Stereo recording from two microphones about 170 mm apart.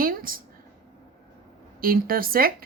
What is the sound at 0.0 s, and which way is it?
Speech, 55° right (ahead or behind).